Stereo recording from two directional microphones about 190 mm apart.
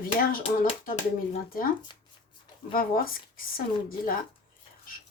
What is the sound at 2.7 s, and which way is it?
A woman's voice, 50° left (ahead or behind).